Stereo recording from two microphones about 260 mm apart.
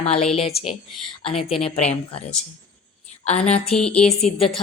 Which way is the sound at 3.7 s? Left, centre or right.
Centre.